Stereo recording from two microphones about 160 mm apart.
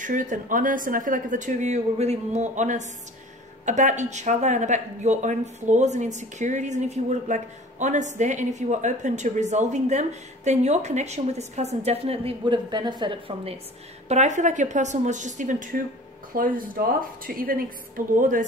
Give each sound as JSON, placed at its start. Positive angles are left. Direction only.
{"t": 0.0, "sound": "speech", "side_deg": -55}
{"t": 14.0, "sound": "a woman's voice", "side_deg": -45}